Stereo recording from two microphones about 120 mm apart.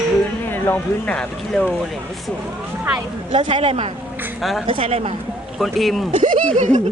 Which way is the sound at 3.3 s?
50° right (ahead or behind).